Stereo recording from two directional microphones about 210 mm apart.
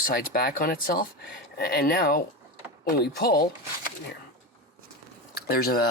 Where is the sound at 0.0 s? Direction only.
45° left (ahead or behind).